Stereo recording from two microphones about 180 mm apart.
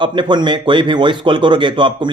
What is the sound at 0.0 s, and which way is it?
Speech, 25° right (ahead or behind).